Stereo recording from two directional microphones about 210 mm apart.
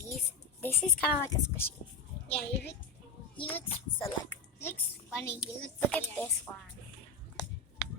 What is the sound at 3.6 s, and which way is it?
Speech, 30° left (ahead or behind).